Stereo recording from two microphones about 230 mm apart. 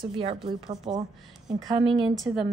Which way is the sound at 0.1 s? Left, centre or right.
Right.